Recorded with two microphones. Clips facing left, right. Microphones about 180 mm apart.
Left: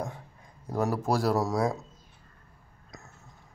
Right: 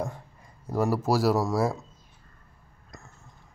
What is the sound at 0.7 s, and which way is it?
Speech, 5° right (ahead or behind).